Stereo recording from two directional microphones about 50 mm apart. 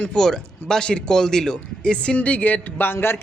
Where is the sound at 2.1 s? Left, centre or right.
Left.